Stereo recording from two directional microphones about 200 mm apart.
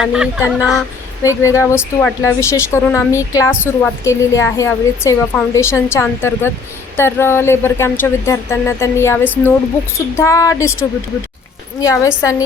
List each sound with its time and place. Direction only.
0.0 s speech: 5° right (ahead or behind)
1.2 s speech: 15° left (ahead or behind)